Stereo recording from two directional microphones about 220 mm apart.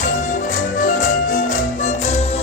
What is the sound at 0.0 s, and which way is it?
Music, 35° left (ahead or behind).